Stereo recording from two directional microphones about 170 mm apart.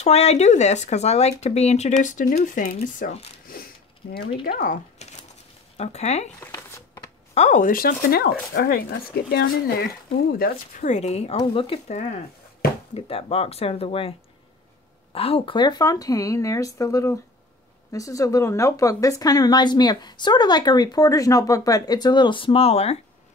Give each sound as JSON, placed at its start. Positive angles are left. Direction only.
{"t": 0.0, "sound": "speech", "side_deg": 40}
{"t": 3.5, "sound": "zipper", "side_deg": 60}
{"t": 4.2, "sound": "speech", "side_deg": 35}
{"t": 4.5, "sound": "speech", "side_deg": 60}
{"t": 5.8, "sound": "speech", "side_deg": 40}
{"t": 6.4, "sound": "a sound", "side_deg": 20}
{"t": 7.3, "sound": "speech", "side_deg": 45}
{"t": 10.4, "sound": "speech", "side_deg": 60}
{"t": 10.8, "sound": "speech", "side_deg": 40}
{"t": 15.1, "sound": "a woman's voice", "side_deg": 35}